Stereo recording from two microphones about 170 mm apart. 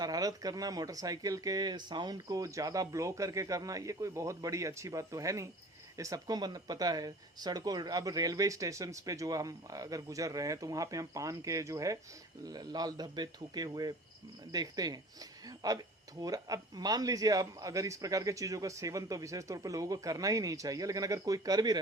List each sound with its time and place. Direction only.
0.0 s speech: 20° right (ahead or behind)